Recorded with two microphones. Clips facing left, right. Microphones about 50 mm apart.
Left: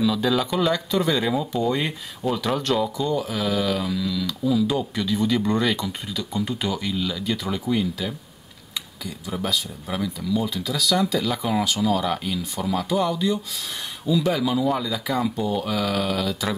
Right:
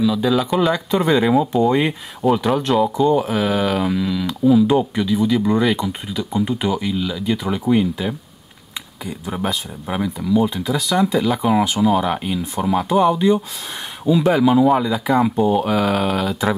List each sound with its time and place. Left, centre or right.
0.0 s speech: centre
0.6 s speech: centre
2.2 s speech: right
2.6 s speech: right
5.0 s speech: centre; by 16.4 s right